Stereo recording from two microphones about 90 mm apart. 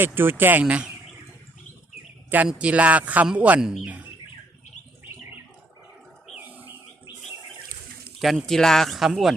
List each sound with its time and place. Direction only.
0.0 s speech: 25° right (ahead or behind)
0.6 s a man's voice: 10° right (ahead or behind)
2.5 s a man's voice: 15° right (ahead or behind)
3.6 s speech: 5° right (ahead or behind)
6.3 s wild animals: 15° right (ahead or behind)
8.2 s speech: centre (ahead or behind)